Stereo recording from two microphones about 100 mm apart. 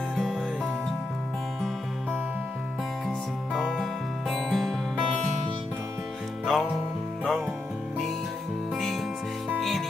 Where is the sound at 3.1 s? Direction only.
5° left (ahead or behind).